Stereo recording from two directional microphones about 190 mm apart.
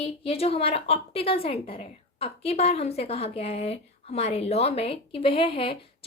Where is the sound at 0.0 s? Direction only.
30° left (ahead or behind).